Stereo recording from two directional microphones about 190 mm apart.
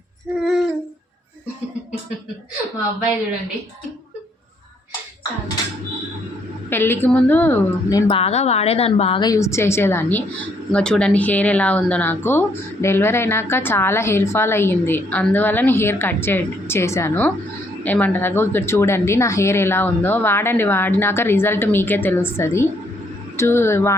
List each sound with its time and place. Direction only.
0.3 s female singing: centre (ahead or behind)
6.7 s speech: 10° left (ahead or behind)
8.2 s a woman's voice: 35° left (ahead or behind); by 23.9 s 15° left (ahead or behind)